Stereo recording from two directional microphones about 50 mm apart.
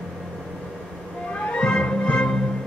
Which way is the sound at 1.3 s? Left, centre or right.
Left.